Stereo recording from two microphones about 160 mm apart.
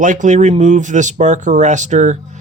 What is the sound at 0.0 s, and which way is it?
Speech, 55° right (ahead or behind).